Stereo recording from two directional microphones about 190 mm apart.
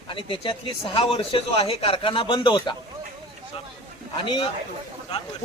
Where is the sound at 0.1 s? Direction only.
25° left (ahead or behind).